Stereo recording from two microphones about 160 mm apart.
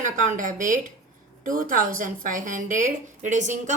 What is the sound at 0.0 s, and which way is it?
A woman's voice, 55° right (ahead or behind).